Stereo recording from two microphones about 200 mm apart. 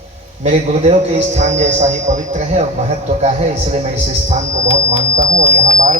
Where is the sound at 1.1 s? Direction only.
35° right (ahead or behind).